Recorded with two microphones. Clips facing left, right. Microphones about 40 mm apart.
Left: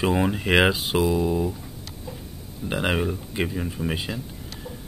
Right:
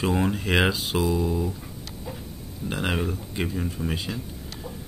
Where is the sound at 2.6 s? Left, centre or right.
Centre.